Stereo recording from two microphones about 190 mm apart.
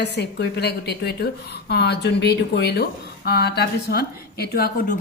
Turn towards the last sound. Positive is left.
turn(degrees=50)  # may be behind; listen again after turning